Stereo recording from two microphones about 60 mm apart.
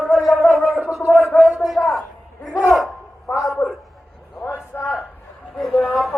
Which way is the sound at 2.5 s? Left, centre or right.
Left.